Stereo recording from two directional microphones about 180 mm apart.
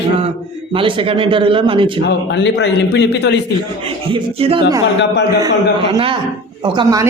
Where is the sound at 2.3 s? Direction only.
80° left.